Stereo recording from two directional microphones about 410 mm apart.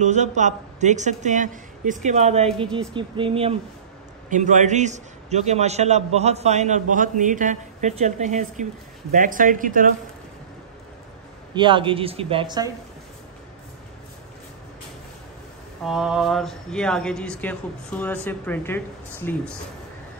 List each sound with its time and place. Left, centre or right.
0.0 s a man's voice: centre
11.5 s a man's voice: centre
15.8 s speech: centre